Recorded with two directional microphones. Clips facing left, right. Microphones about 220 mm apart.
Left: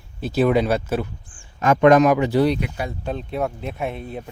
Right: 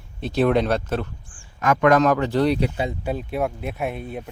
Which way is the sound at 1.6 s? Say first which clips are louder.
Left 3 dB; 25° left (ahead or behind).